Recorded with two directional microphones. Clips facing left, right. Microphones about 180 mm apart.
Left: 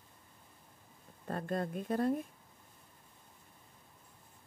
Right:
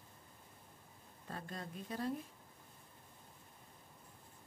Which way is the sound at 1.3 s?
55° left (ahead or behind).